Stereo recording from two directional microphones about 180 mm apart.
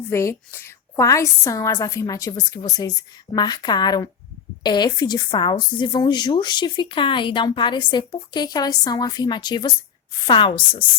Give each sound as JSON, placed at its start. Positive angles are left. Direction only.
{"t": 0.1, "sound": "a woman's voice", "side_deg": 15}